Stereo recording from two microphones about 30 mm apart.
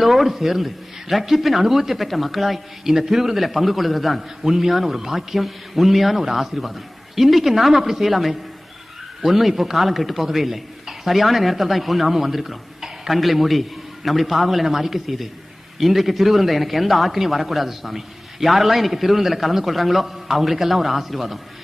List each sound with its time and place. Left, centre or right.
0.0 s speech: centre
2.8 s a man's voice: centre